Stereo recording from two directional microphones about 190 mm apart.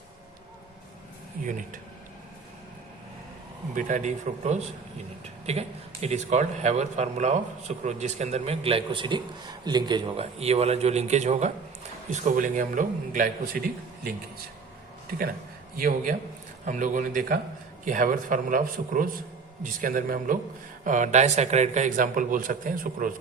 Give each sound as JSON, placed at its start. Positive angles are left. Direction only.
{"t": 1.5, "sound": "a man's voice", "side_deg": -40}
{"t": 3.8, "sound": "a man's voice", "side_deg": -40}
{"t": 15.8, "sound": "a man's voice", "side_deg": -45}